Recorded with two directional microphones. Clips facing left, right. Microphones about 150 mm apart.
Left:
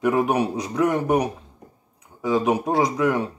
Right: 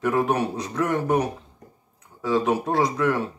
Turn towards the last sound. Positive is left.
turn(degrees=15)  # may be behind; listen again after turning